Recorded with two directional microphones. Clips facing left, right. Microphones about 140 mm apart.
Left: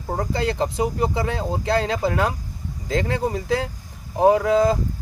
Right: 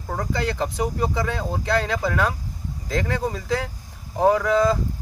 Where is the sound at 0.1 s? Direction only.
25° left (ahead or behind).